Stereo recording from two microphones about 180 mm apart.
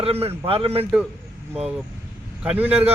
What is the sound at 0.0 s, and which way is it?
Speech, 35° right (ahead or behind).